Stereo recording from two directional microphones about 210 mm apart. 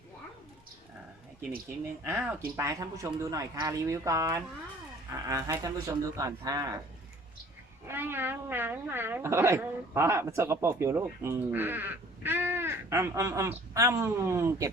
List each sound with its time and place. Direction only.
2.0 s speech: 10° right (ahead or behind)
7.9 s speech: 10° right (ahead or behind)